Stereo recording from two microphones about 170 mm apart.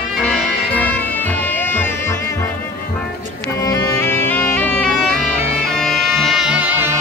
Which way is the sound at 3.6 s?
20° left (ahead or behind).